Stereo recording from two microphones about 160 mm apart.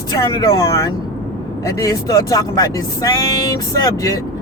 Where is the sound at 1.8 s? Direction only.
20° left (ahead or behind).